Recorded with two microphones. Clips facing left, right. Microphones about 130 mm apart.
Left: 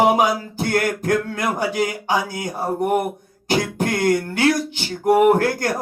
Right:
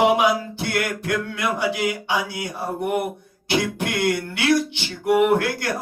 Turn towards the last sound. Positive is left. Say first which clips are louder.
# left 4 dB
turn(degrees=40)  # may be behind; listen again after turning